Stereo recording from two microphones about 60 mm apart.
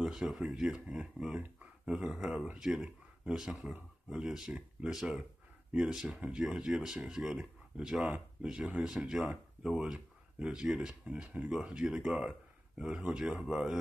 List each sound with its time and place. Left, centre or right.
0.0 s speech: centre
4.9 s speech: centre
6.4 s speech: centre